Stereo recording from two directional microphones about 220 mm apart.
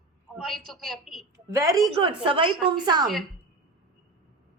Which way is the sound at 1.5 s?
15° right (ahead or behind).